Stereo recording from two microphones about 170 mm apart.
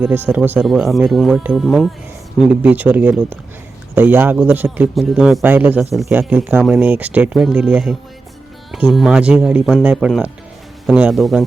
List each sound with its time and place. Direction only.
0.0 s speech: 10° right (ahead or behind)
5.9 s speech: centre (ahead or behind)